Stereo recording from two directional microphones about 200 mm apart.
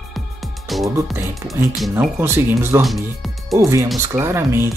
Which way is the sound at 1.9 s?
10° right (ahead or behind).